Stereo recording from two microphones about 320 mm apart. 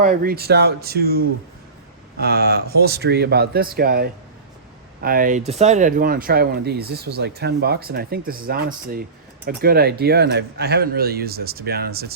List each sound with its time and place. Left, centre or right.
0.0 s speech: right
2.2 s speech: right